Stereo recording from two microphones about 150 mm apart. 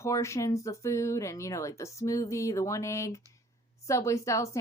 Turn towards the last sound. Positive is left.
turn(degrees=20)  # may be behind; listen again after turning